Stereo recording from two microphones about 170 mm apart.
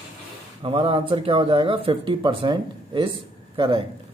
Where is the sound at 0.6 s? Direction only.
30° right (ahead or behind).